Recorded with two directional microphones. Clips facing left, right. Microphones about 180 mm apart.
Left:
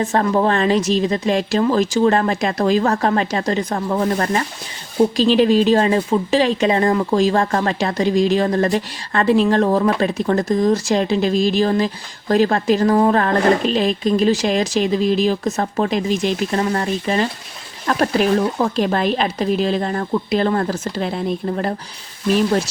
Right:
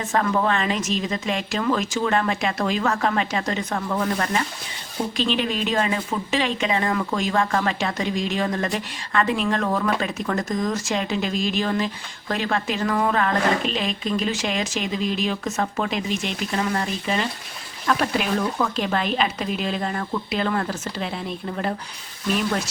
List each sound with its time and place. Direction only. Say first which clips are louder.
0.0 s speech: left 5 dB; 35° left (ahead or behind)
22.3 s speech: left 7 dB; 35° left (ahead or behind)